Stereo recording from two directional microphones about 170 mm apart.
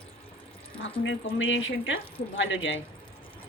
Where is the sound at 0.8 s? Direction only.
90° left.